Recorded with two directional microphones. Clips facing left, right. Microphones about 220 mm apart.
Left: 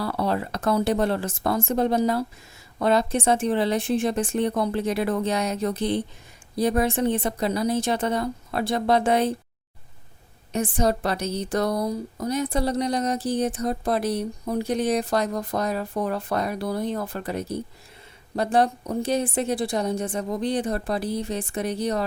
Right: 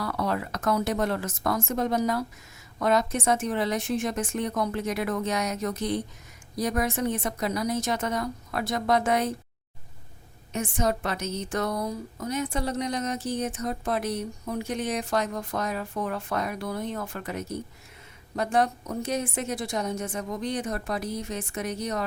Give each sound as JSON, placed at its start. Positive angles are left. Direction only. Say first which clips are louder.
{"t": 0.0, "sound": "a woman's voice", "louder": "left 3 dB", "side_deg": 30}
{"t": 10.5, "sound": "a woman's voice", "louder": "left 4 dB", "side_deg": 35}